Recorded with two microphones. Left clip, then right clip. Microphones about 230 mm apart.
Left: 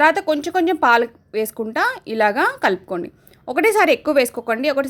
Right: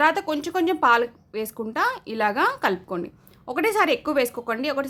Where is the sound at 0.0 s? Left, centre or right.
Centre.